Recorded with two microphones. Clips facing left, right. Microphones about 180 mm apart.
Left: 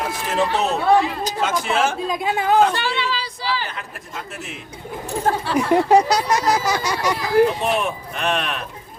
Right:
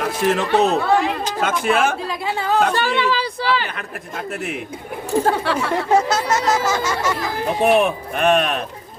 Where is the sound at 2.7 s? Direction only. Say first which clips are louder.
Right 5 dB; 50° right (ahead or behind).